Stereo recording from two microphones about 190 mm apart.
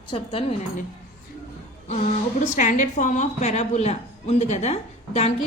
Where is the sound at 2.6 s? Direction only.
40° left (ahead or behind).